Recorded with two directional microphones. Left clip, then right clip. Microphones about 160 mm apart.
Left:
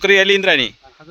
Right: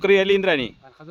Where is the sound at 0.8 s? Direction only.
20° right (ahead or behind).